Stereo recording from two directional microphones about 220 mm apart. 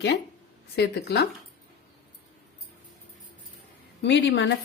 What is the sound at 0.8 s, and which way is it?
Speech, 45° left (ahead or behind).